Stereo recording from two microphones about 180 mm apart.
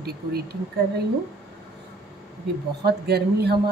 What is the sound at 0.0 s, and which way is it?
Speech, 60° right (ahead or behind).